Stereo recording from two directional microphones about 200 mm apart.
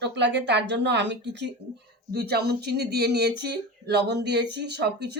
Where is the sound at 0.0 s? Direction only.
60° right (ahead or behind).